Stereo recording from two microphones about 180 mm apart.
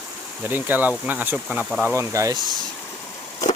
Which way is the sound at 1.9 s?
15° right (ahead or behind).